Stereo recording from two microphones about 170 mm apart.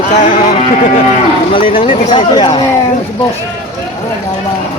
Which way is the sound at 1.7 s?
30° left (ahead or behind).